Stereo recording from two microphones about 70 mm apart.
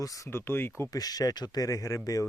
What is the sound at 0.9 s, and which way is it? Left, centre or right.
Speech, left.